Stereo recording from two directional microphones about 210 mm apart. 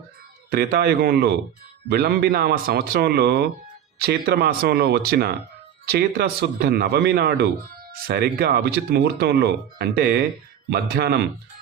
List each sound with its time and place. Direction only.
0.5 s speech: 45° right (ahead or behind)